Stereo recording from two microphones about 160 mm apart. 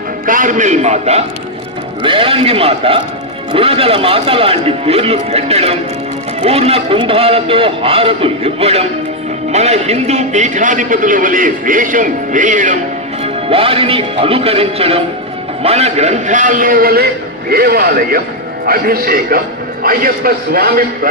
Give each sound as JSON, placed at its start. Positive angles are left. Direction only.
{"t": 0.3, "sound": "a man's voice", "side_deg": -55}
{"t": 2.0, "sound": "a man's voice", "side_deg": -35}
{"t": 13.2, "sound": "a man's voice", "side_deg": -35}